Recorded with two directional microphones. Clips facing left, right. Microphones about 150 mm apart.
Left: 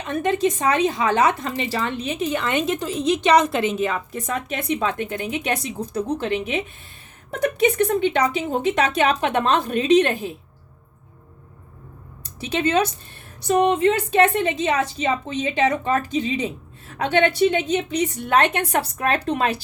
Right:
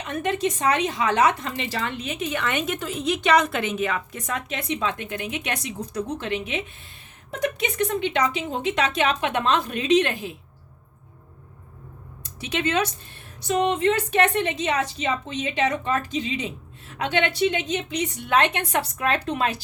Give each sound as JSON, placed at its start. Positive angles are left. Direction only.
{"t": 0.0, "sound": "speech", "side_deg": 30}
{"t": 3.4, "sound": "speech", "side_deg": 35}
{"t": 4.5, "sound": "speech", "side_deg": 45}
{"t": 6.1, "sound": "speech", "side_deg": 40}
{"t": 7.9, "sound": "speech", "side_deg": 35}
{"t": 8.4, "sound": "speech", "side_deg": 50}
{"t": 12.4, "sound": "speech", "side_deg": 35}